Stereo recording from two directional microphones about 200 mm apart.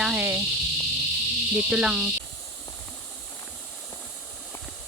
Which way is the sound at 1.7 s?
5° right (ahead or behind).